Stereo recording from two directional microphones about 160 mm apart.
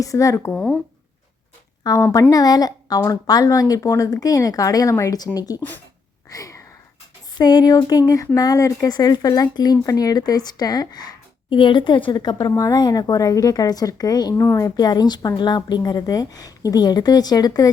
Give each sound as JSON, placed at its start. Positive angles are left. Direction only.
{"t": 0.0, "sound": "speech", "side_deg": 20}
{"t": 0.5, "sound": "speech", "side_deg": 10}
{"t": 1.8, "sound": "a woman's voice", "side_deg": 20}
{"t": 6.3, "sound": "a sound", "side_deg": 20}
{"t": 7.3, "sound": "speech", "side_deg": 25}